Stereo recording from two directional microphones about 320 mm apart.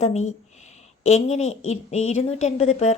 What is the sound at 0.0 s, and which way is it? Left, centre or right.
A woman's voice, left.